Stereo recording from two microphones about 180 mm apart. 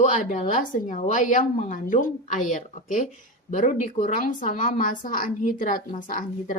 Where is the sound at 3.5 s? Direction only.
45° left (ahead or behind).